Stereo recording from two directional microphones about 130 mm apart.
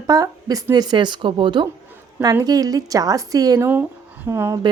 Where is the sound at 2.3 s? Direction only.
30° right (ahead or behind).